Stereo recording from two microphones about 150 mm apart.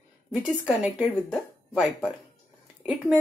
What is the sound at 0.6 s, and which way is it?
Speech, 5° right (ahead or behind).